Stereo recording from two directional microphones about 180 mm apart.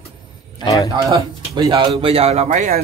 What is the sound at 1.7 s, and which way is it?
Speech, 30° right (ahead or behind).